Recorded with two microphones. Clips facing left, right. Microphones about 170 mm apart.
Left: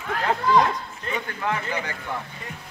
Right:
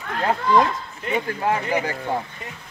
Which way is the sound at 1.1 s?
30° right (ahead or behind).